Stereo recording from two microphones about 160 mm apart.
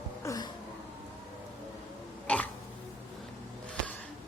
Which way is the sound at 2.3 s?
10° left (ahead or behind).